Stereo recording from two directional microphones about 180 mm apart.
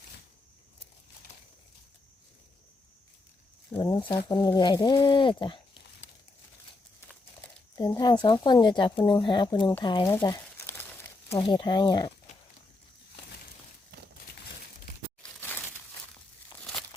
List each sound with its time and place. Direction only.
3.8 s speech: 25° left (ahead or behind)
7.9 s speech: 25° left (ahead or behind)
10.2 s crumpling: 15° left (ahead or behind)
11.3 s speech: 30° left (ahead or behind)